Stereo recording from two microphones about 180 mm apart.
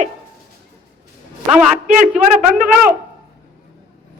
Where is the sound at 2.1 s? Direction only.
5° right (ahead or behind).